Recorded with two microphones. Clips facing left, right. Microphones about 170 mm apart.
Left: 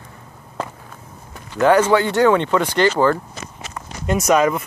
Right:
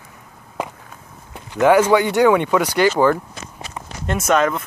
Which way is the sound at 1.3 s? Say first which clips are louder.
Right 1 dB; 15° right (ahead or behind).